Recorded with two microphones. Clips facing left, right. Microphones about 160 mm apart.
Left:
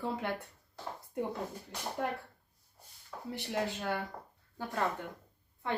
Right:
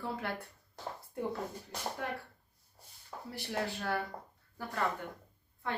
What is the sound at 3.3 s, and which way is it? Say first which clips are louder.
Speech: left 2 dB; 20° left (ahead or behind).